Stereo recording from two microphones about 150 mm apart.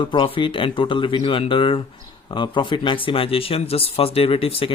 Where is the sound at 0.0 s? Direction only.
35° left (ahead or behind).